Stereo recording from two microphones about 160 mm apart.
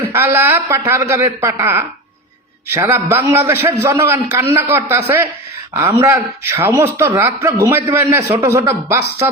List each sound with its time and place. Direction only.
0.1 s speech: 15° right (ahead or behind)